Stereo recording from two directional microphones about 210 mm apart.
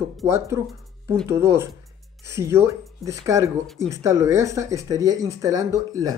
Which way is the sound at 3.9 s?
15° right (ahead or behind).